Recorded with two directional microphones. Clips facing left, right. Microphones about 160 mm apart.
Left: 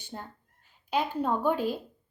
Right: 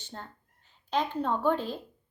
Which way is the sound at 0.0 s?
10° left (ahead or behind).